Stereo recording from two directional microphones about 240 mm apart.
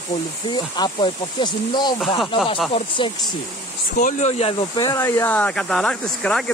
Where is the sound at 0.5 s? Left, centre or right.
Centre.